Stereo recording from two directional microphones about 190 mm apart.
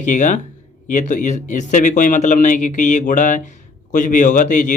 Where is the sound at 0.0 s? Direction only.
40° left (ahead or behind).